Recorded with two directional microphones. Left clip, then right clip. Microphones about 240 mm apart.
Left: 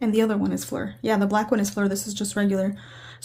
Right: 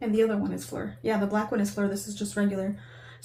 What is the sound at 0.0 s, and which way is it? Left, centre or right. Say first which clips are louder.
Speech: left 2 dB; left.